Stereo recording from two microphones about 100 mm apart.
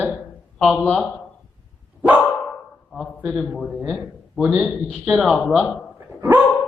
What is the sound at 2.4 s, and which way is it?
Dog, 10° left (ahead or behind).